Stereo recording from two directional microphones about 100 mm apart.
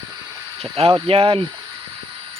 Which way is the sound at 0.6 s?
75° right (ahead or behind).